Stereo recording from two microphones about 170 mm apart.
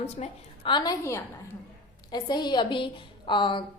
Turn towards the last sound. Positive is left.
turn(degrees=30)  # may be behind; listen again after turning